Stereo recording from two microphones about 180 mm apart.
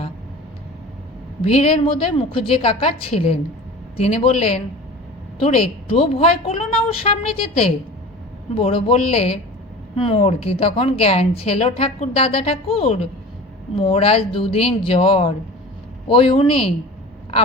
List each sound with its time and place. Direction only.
1.4 s a woman's voice: 35° left (ahead or behind)
8.5 s a woman's voice: 35° left (ahead or behind)